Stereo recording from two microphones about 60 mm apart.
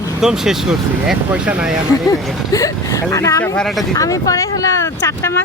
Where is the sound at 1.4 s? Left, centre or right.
Right.